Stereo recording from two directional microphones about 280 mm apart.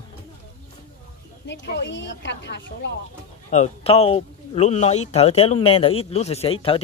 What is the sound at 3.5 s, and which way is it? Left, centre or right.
Speech, left.